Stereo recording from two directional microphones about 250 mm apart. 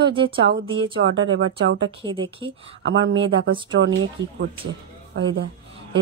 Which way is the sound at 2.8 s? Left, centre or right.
Right.